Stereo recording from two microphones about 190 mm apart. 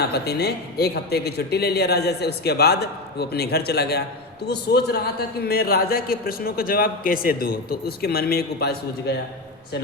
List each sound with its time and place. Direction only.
0.3 s a man's voice: 55° left (ahead or behind)